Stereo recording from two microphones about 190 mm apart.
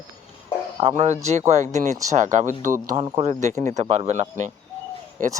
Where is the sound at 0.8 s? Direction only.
35° right (ahead or behind).